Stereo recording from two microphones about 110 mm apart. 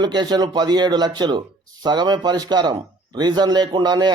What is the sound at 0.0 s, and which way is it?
Speech, 40° right (ahead or behind).